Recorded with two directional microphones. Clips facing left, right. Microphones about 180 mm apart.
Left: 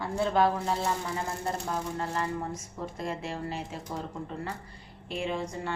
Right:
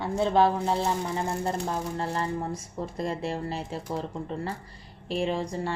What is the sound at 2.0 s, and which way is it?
A woman's voice, 30° right (ahead or behind).